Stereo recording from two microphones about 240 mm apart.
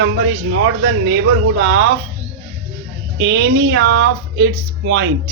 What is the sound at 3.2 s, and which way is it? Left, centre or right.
Speech, right.